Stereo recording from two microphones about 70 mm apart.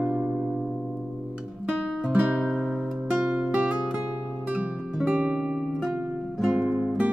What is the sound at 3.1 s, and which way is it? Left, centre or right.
Music, centre.